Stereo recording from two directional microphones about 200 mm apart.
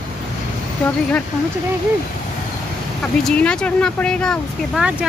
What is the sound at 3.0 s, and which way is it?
Speech, 5° left (ahead or behind).